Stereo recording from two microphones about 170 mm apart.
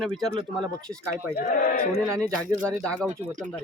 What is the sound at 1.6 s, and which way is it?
Speech, 60° left (ahead or behind).